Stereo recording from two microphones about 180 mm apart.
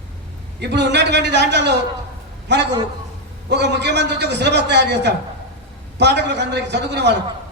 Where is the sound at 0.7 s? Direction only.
70° right (ahead or behind).